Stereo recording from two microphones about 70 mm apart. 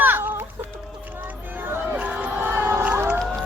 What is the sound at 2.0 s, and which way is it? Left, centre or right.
Crowd, centre.